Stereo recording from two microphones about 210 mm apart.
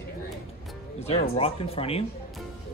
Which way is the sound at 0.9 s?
30° left (ahead or behind).